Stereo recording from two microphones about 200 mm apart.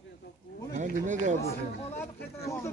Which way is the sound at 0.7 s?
40° right (ahead or behind).